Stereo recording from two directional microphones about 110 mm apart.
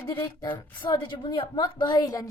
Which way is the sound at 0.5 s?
45° left (ahead or behind).